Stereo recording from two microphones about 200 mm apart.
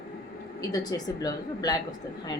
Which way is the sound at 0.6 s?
20° left (ahead or behind).